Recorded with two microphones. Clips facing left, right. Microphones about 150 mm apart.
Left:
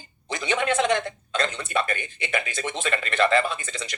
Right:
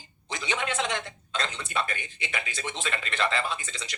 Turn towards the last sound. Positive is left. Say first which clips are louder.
# left 4 dB
turn(degrees=55)  # may be behind; listen again after turning